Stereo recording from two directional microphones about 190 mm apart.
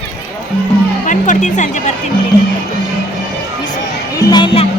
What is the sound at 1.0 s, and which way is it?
Speech, 40° left (ahead or behind).